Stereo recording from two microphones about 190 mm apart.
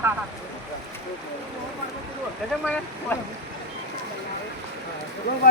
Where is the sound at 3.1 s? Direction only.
10° left (ahead or behind).